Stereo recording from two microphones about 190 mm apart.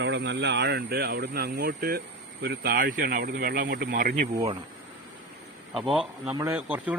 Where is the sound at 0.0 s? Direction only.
70° right (ahead or behind); by 4.1 s 50° right (ahead or behind).